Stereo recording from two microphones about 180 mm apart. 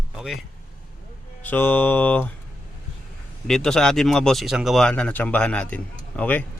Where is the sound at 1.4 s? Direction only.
10° left (ahead or behind).